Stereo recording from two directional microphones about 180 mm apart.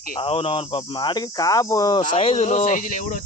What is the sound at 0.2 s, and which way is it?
Speech, 30° left (ahead or behind).